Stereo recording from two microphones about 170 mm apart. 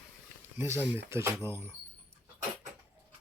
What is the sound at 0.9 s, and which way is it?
Speech, 15° right (ahead or behind).